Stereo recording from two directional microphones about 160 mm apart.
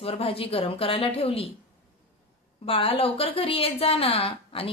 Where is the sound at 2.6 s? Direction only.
35° left (ahead or behind).